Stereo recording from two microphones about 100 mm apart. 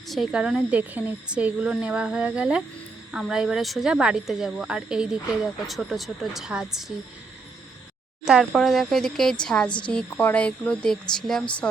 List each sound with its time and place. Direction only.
0.1 s speech: 5° right (ahead or behind)
8.2 s speech: 5° right (ahead or behind)
9.6 s a woman's voice: 50° left (ahead or behind)
9.9 s speech: 10° left (ahead or behind)